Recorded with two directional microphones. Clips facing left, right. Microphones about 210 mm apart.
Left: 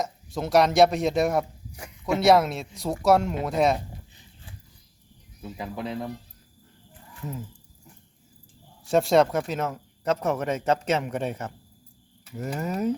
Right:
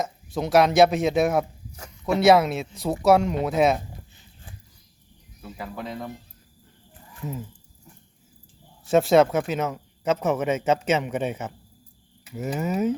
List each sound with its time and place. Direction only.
0.0 s speech: centre (ahead or behind)
5.4 s speech: 15° left (ahead or behind)
8.8 s speech: centre (ahead or behind)